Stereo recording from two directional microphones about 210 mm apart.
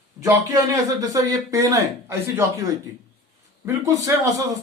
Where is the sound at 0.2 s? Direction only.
15° right (ahead or behind).